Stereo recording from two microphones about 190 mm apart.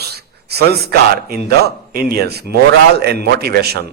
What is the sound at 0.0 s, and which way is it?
A man's voice, 55° right (ahead or behind).